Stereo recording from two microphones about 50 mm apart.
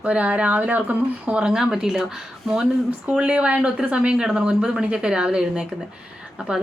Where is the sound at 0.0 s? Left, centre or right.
Right; by 2.0 s centre.